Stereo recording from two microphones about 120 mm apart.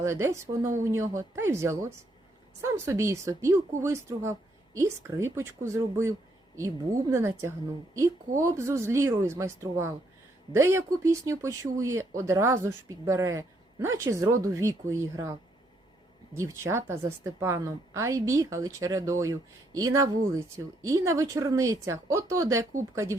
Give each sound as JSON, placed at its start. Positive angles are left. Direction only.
{"t": 0.0, "sound": "speech", "side_deg": -25}